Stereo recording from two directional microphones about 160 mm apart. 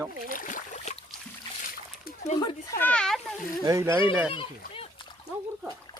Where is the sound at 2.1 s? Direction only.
70° left (ahead or behind).